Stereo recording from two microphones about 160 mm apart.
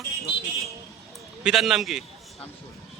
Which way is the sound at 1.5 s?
5° right (ahead or behind).